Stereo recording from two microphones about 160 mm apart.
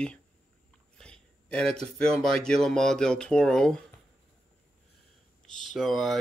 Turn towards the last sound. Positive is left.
turn(degrees=0)  # may be behind; listen again after turning